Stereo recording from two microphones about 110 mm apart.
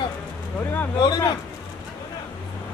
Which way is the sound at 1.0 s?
35° left (ahead or behind).